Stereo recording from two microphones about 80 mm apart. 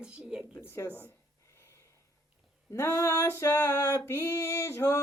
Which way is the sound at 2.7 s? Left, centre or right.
Left.